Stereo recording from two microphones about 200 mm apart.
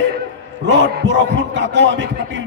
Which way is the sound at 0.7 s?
65° right (ahead or behind).